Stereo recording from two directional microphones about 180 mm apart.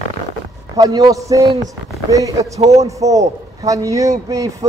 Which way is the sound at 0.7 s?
20° right (ahead or behind).